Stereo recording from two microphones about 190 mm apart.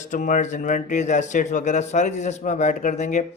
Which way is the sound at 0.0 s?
40° left (ahead or behind).